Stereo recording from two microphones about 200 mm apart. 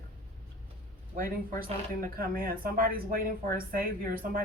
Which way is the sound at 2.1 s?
45° right (ahead or behind).